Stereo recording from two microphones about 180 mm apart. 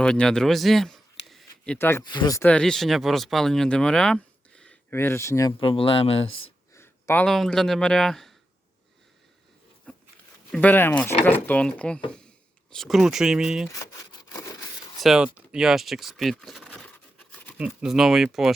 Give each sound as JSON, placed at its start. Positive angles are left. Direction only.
{"t": 0.0, "sound": "speech", "side_deg": 5}
{"t": 2.0, "sound": "speech", "side_deg": 20}
{"t": 2.4, "sound": "speech", "side_deg": 5}
{"t": 6.7, "sound": "speech", "side_deg": 15}
{"t": 9.9, "sound": "a sound", "side_deg": 5}
{"t": 10.5, "sound": "speech", "side_deg": 10}
{"t": 13.7, "sound": "wood", "side_deg": 20}
{"t": 15.0, "sound": "speech", "side_deg": -5}